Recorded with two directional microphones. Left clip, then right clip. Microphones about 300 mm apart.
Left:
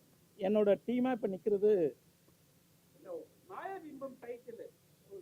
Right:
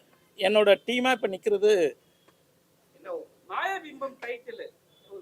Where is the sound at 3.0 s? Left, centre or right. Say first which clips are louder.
Right 9 dB; centre.